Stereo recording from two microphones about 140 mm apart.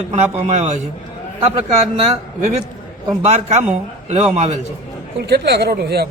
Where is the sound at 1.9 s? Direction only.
65° right (ahead or behind).